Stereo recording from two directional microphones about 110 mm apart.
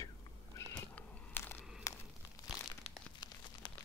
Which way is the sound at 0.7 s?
15° left (ahead or behind).